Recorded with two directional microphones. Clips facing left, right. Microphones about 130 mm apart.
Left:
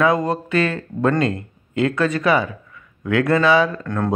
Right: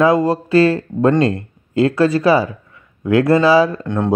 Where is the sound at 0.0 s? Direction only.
30° right (ahead or behind).